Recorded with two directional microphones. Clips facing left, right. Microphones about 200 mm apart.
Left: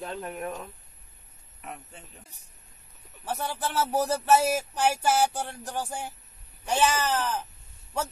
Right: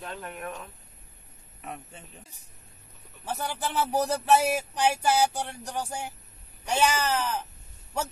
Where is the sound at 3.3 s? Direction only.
Centre (ahead or behind).